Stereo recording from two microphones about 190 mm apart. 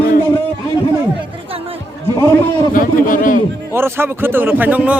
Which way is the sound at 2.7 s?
45° left (ahead or behind).